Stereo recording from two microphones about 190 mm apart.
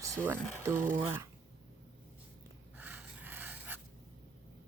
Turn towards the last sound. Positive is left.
turn(degrees=-10)  # may be behind; listen again after turning